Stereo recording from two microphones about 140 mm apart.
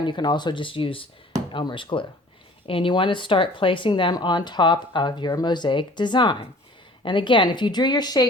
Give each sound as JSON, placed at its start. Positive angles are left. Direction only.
{"t": 0.0, "sound": "speech", "side_deg": 30}